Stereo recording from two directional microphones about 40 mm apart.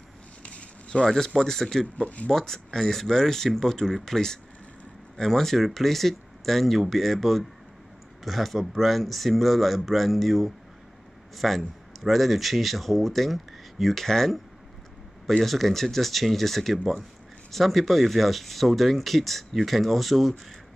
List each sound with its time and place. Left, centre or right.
0.4 s a sound: left
1.0 s speech: centre
14.0 s speech: centre
15.4 s speech: centre